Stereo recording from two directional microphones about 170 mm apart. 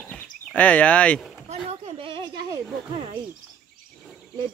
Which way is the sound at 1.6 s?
35° right (ahead or behind).